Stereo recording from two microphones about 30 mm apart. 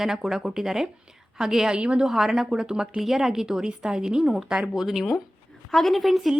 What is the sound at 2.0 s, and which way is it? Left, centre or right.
Speech, centre.